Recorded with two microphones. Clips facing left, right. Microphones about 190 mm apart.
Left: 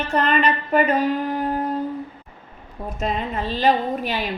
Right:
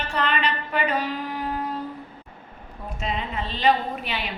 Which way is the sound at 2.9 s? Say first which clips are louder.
Left 4 dB; 45° left (ahead or behind).